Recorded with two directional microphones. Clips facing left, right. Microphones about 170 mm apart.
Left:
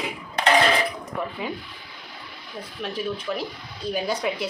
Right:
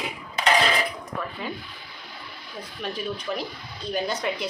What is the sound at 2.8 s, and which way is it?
A woman's voice, 5° left (ahead or behind).